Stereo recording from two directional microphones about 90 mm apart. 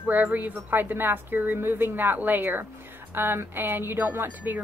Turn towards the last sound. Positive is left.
turn(degrees=-20)  # may be behind; listen again after turning